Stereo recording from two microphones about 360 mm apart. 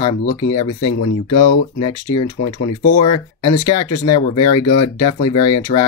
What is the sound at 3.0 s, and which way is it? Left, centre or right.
Speech, centre.